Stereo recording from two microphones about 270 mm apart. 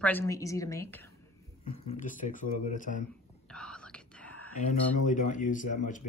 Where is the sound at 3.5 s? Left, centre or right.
Centre.